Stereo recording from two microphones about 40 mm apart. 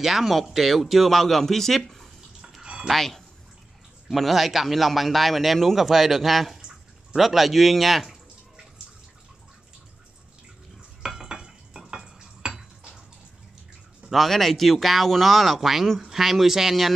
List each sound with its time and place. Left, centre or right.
0.0 s a man's voice: centre
2.6 s a sound: right
2.9 s a man's voice: centre
11.0 s stir: centre
14.1 s a man's voice: centre